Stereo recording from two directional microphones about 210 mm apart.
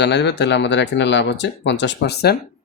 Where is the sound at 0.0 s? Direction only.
55° left (ahead or behind).